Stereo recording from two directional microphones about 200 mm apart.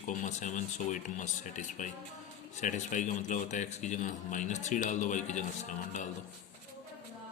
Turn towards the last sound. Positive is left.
turn(degrees=40)  # may be behind; listen again after turning